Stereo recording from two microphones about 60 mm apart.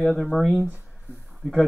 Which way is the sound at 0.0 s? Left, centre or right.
Centre.